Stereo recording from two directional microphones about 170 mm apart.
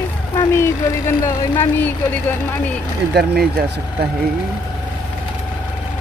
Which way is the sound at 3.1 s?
70° right (ahead or behind).